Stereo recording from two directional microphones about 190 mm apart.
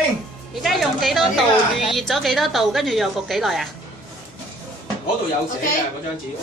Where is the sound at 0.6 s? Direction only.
Centre (ahead or behind).